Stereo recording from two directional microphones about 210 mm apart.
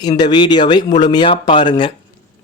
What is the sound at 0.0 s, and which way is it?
A man's voice, 20° left (ahead or behind).